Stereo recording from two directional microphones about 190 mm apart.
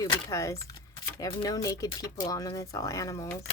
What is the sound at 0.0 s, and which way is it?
A woman's voice, 20° left (ahead or behind).